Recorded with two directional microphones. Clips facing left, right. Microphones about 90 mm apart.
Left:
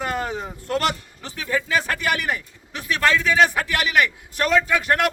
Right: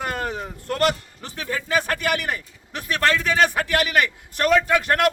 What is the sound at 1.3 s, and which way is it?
A man's voice, 50° right (ahead or behind).